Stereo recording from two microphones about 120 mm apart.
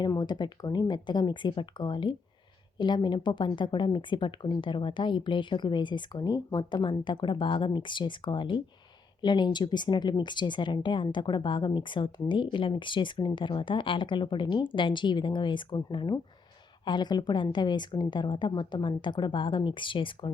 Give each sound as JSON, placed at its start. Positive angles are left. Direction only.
{"t": 0.0, "sound": "speech", "side_deg": 35}